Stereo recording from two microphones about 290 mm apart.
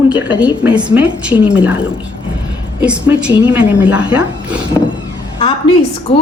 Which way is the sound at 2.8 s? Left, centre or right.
Centre.